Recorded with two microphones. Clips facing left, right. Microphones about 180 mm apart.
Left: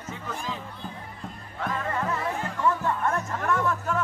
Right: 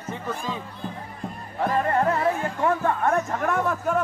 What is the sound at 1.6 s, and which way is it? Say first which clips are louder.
Speech: right 7 dB; 60° right (ahead or behind).